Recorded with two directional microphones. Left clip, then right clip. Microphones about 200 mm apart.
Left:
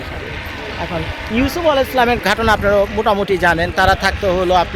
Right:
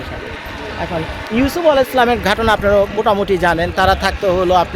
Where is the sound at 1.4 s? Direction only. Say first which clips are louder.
Right 2 dB; 20° right (ahead or behind).